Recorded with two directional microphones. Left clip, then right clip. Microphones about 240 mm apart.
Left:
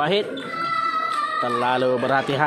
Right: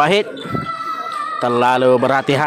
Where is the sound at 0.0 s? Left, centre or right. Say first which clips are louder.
Right 7 dB; right.